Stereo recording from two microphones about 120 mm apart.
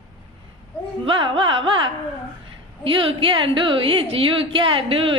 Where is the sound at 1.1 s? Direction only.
45° right (ahead or behind).